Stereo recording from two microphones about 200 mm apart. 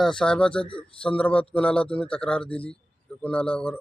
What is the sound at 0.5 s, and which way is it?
Speech, 25° left (ahead or behind).